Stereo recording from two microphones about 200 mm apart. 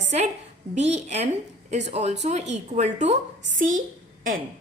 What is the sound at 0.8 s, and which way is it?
A woman's voice, 35° right (ahead or behind).